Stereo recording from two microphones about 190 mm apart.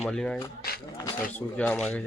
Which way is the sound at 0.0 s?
5° left (ahead or behind).